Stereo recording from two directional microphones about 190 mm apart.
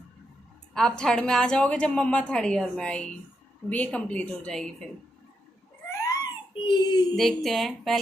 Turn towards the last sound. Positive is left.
turn(degrees=0)  # may be behind; listen again after turning